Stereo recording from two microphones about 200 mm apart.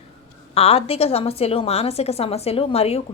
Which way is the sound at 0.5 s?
30° left (ahead or behind).